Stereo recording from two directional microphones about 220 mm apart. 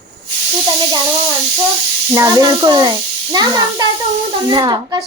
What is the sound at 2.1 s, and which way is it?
A woman's voice, 15° right (ahead or behind).